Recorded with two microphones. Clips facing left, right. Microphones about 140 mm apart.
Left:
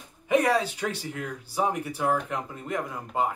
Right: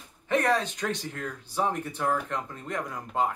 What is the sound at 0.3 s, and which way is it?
Speech, 10° left (ahead or behind).